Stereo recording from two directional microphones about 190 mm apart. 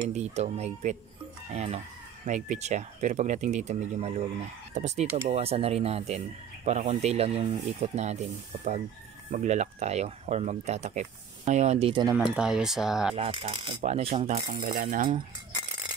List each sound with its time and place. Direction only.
0.1 s speech: 35° right (ahead or behind)
12.4 s speech: 5° right (ahead or behind)
13.1 s speech: 30° right (ahead or behind)
14.7 s cutlery: 45° right (ahead or behind)